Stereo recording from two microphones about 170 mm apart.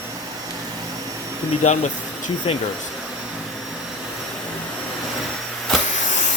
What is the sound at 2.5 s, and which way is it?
Speech, 35° left (ahead or behind).